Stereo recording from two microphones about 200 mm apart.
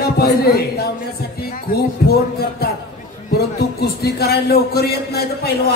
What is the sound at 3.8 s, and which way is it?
A man's voice, 50° left (ahead or behind).